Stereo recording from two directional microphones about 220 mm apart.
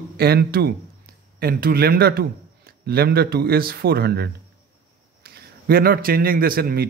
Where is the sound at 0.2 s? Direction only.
45° right (ahead or behind).